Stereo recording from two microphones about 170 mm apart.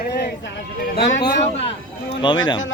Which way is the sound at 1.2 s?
35° left (ahead or behind).